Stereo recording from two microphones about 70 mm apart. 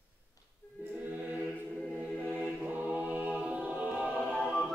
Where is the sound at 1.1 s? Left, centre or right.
Right.